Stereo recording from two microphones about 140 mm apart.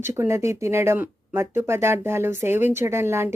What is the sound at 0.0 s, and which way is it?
Speech, 20° right (ahead or behind).